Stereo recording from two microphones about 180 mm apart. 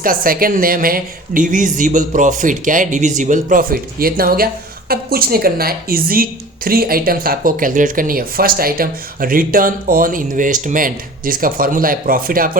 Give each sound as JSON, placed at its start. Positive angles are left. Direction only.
{"t": 0.0, "sound": "a woman's voice", "side_deg": -50}